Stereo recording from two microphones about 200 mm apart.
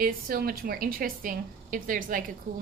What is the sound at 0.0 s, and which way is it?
A woman's voice, 45° right (ahead or behind).